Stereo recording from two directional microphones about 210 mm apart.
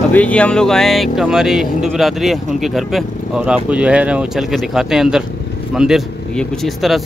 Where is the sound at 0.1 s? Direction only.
5° left (ahead or behind).